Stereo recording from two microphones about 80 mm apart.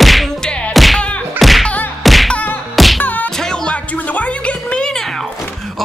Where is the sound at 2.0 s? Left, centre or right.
Centre.